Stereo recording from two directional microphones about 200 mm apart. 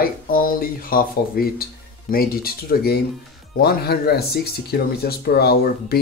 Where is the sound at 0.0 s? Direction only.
45° left (ahead or behind).